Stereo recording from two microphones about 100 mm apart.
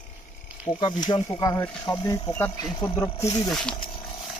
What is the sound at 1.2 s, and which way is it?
Speech, 30° left (ahead or behind).